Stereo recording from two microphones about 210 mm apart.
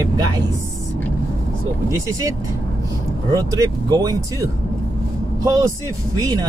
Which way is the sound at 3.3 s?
15° right (ahead or behind).